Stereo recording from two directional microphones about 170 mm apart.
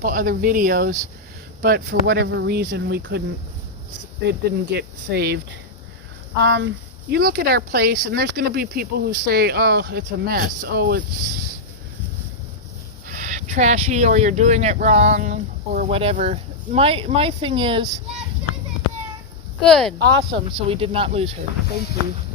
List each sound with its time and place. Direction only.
0.0 s speech: 55° right (ahead or behind); by 3.2 s 85° right
4.3 s speech: 75° right (ahead or behind)
6.4 s speech: 90° right
7.1 s speech: 70° right (ahead or behind)
13.1 s speech: 45° right (ahead or behind)
15.9 s speech: 35° right (ahead or behind)
19.6 s speech: centre (ahead or behind)
20.0 s speech: 80° right
20.5 s speech: 35° right (ahead or behind)